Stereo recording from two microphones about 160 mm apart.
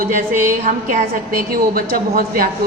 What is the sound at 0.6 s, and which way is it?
A woman's voice, 55° right (ahead or behind).